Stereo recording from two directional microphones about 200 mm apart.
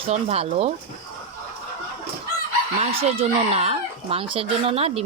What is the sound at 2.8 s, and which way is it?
Speech, 30° right (ahead or behind).